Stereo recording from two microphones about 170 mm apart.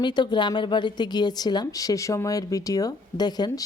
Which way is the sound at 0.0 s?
25° left (ahead or behind).